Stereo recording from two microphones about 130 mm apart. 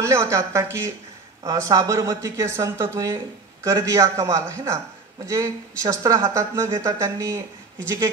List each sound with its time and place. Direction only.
0.0 s speech: 20° right (ahead or behind)